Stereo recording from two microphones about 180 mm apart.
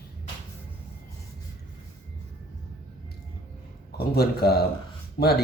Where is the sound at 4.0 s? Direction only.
60° left (ahead or behind).